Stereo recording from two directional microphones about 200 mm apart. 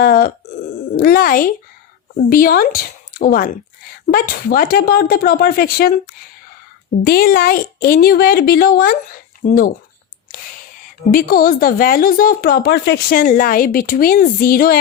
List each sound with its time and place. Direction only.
0.0 s speech: 50° left (ahead or behind)
7.0 s speech: 50° left (ahead or behind)
11.1 s speech: 45° left (ahead or behind)